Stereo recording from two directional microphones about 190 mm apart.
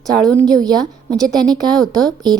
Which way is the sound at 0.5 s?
20° right (ahead or behind).